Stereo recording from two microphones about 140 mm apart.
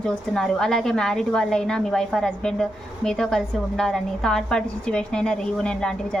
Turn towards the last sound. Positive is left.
turn(degrees=5)  # may be behind; listen again after turning